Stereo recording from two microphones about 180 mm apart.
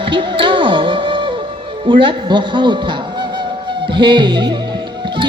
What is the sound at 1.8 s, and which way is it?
A man's voice, 30° right (ahead or behind).